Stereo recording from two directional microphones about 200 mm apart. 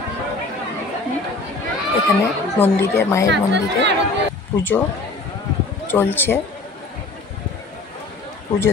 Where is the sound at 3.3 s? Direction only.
60° right (ahead or behind).